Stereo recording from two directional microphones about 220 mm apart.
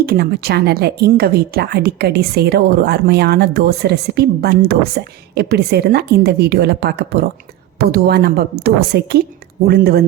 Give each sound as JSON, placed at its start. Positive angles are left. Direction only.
{"t": 0.0, "sound": "a woman's voice", "side_deg": -45}